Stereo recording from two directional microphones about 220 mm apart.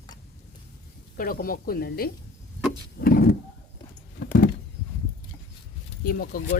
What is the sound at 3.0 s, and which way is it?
Power windows, 40° left (ahead or behind).